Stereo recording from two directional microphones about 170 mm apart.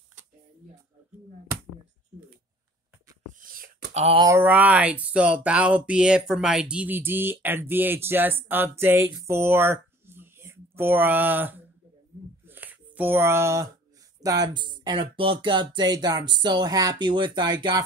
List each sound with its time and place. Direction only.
3.3 s whispering: 55° right (ahead or behind)
3.9 s speech: 40° right (ahead or behind)
4.2 s speech: 15° right (ahead or behind)
12.4 s a sound: 10° right (ahead or behind)
14.5 s speech: 25° right (ahead or behind)